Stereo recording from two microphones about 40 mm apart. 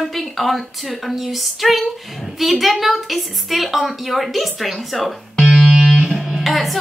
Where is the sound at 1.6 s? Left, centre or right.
Centre.